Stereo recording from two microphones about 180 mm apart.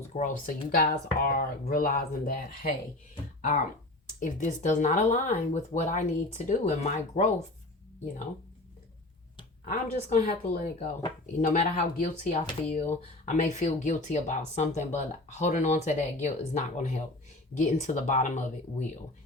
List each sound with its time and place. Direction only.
0.1 s speech: 45° left (ahead or behind)
4.2 s speech: 45° left (ahead or behind)
9.6 s speech: 45° left (ahead or behind)